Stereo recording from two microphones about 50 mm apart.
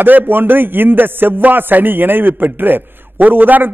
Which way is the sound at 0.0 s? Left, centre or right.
Right.